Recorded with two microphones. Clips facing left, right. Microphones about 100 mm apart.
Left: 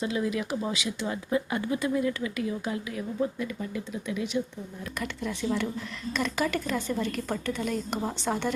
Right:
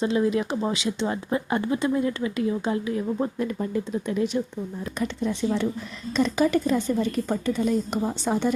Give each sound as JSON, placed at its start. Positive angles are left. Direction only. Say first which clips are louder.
{"t": 0.0, "sound": "speech", "louder": "right 6 dB", "side_deg": -30}
{"t": 4.9, "sound": "a woman's voice", "louder": "right 6 dB", "side_deg": -20}